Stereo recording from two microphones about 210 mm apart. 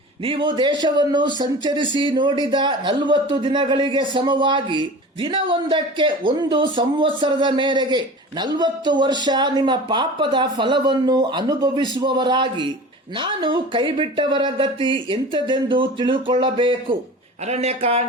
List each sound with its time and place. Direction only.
0.3 s speech: 25° right (ahead or behind)